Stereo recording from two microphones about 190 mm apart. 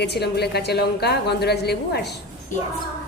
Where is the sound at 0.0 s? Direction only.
60° left (ahead or behind).